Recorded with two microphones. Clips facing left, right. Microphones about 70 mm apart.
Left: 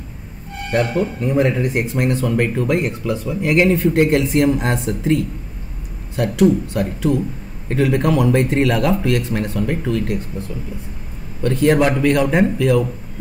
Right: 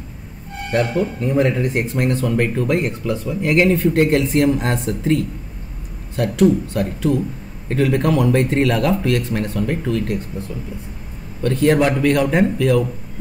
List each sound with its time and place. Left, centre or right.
0.7 s speech: centre
11.4 s speech: centre